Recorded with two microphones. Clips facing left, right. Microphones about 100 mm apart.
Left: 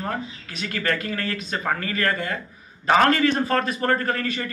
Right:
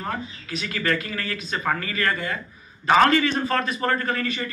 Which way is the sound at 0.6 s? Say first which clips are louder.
Even; 50° left (ahead or behind).